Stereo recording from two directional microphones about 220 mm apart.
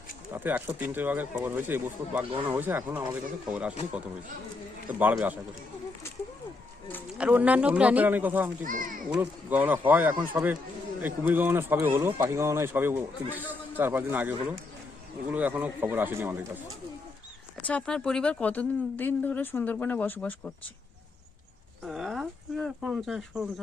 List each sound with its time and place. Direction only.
0.3 s speech: 10° right (ahead or behind)
4.9 s speech: 5° right (ahead or behind)
7.2 s speech: 5° right (ahead or behind)
8.6 s a child's voice: 35° right (ahead or behind)
9.1 s speech: 10° right (ahead or behind)
17.7 s speech: 5° left (ahead or behind)
21.8 s speech: centre (ahead or behind)